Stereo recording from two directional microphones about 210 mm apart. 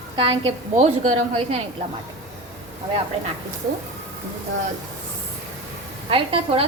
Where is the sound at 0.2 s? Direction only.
25° right (ahead or behind).